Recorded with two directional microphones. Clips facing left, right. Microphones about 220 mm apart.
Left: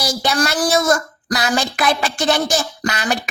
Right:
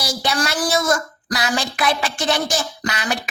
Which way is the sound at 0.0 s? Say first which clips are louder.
Left 3 dB; 45° left (ahead or behind).